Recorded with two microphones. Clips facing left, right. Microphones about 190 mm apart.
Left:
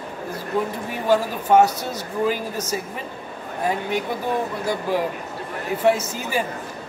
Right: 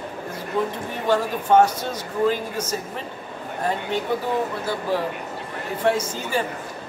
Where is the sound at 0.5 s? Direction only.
10° left (ahead or behind).